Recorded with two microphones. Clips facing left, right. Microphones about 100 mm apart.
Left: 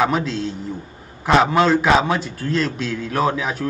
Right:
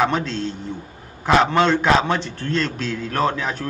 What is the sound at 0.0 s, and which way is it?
A man's voice, 5° left (ahead or behind).